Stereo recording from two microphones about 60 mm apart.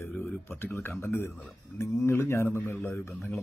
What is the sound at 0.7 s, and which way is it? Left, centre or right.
A man's voice, left.